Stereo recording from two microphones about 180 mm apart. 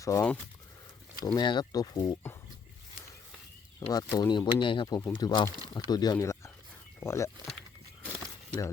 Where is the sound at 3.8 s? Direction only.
20° left (ahead or behind).